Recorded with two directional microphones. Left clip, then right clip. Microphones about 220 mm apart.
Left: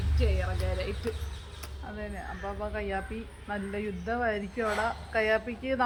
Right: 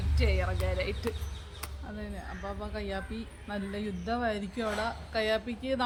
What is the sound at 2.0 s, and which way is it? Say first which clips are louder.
Speech: left 3 dB; 5° left (ahead or behind).